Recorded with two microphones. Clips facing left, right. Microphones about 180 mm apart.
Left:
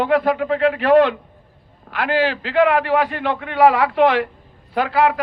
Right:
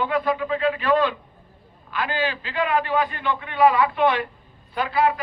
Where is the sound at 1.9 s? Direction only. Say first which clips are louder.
Left 6 dB; 85° left.